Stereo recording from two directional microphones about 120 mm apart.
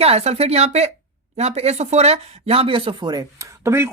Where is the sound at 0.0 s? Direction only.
60° right (ahead or behind).